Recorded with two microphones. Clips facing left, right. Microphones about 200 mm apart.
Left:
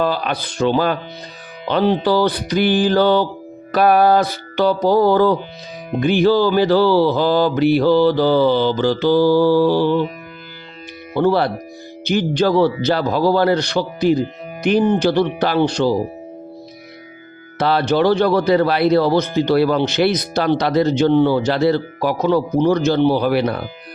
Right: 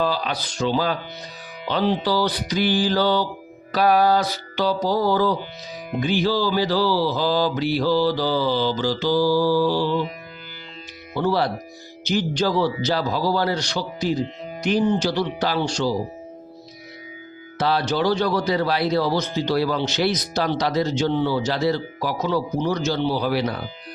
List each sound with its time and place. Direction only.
0.0 s a man's voice: 55° left (ahead or behind)
11.1 s a man's voice: 55° left (ahead or behind)
17.6 s a man's voice: 60° left (ahead or behind)